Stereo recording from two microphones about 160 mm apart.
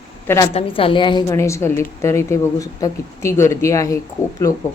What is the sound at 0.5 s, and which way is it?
Speech, 35° left (ahead or behind).